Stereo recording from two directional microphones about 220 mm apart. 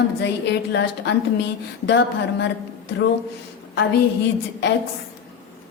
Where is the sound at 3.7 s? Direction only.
50° left (ahead or behind).